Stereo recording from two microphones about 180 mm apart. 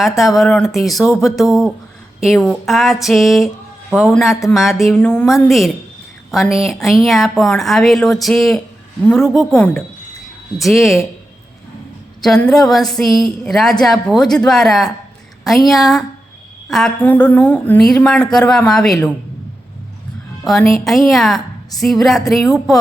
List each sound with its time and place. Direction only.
0.2 s a woman's voice: centre (ahead or behind)
12.2 s a woman's voice: 5° left (ahead or behind)
20.4 s a woman's voice: centre (ahead or behind)